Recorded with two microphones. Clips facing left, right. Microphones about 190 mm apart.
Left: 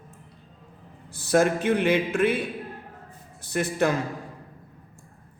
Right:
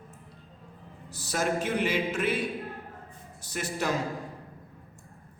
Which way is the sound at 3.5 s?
55° left (ahead or behind).